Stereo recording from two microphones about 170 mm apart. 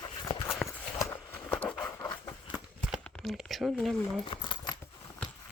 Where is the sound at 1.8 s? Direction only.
20° left (ahead or behind).